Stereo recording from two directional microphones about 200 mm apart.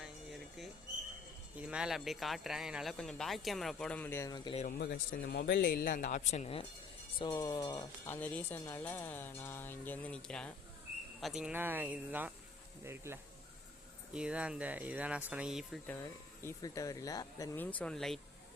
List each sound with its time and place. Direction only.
0.0 s a sound: centre (ahead or behind)
1.5 s speech: 5° right (ahead or behind); by 4.6 s 20° left (ahead or behind)
4.6 s speech: 45° left (ahead or behind)
7.3 s speech: 20° left (ahead or behind); by 16.0 s centre (ahead or behind)
16.0 s speech: 15° left (ahead or behind)